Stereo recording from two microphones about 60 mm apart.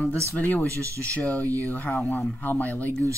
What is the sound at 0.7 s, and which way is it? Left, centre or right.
Speech, right.